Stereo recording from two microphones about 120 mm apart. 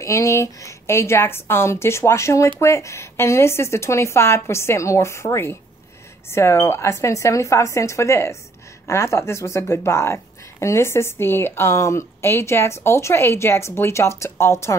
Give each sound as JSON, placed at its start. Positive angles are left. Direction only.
{"t": 0.0, "sound": "speech", "side_deg": 25}